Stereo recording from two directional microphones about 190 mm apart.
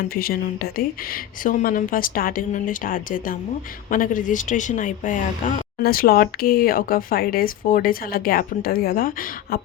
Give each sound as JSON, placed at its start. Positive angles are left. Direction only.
{"t": 0.1, "sound": "speech", "side_deg": 50}